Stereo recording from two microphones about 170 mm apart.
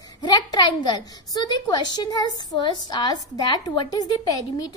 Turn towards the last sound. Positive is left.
turn(degrees=20)  # may be behind; listen again after turning